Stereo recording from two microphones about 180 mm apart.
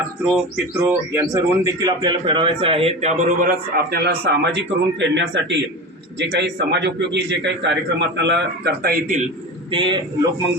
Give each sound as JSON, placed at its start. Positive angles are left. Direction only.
{"t": 0.5, "sound": "speech", "side_deg": -10}
{"t": 3.9, "sound": "a man's voice", "side_deg": -65}
{"t": 6.1, "sound": "a man's voice", "side_deg": -70}
{"t": 9.7, "sound": "speech", "side_deg": -25}